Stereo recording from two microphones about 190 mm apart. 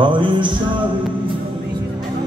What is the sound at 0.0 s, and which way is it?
Music, 25° right (ahead or behind).